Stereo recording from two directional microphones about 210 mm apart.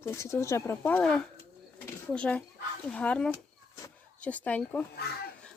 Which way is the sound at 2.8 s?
5° left (ahead or behind).